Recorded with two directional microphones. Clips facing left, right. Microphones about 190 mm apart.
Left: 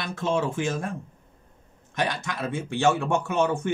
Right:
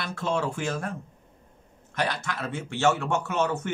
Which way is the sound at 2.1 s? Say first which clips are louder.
Left 2 dB; 15° left (ahead or behind).